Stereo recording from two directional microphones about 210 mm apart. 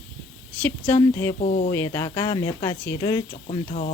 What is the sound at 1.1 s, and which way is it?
Speech, 15° left (ahead or behind).